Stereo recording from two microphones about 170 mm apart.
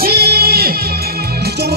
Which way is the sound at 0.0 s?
65° right (ahead or behind).